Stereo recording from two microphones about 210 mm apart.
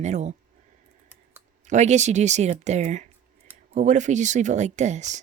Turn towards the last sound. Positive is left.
turn(degrees=-35)  # may be behind; listen again after turning